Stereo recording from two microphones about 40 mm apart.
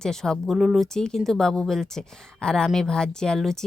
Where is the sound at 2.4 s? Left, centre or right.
Left.